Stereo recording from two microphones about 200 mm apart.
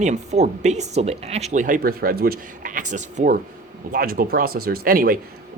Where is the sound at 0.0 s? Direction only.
35° right (ahead or behind).